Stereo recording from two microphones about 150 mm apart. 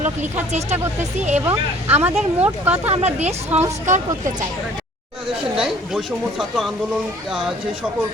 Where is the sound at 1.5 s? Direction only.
15° right (ahead or behind).